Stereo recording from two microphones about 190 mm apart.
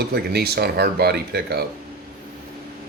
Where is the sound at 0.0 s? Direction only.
60° right (ahead or behind).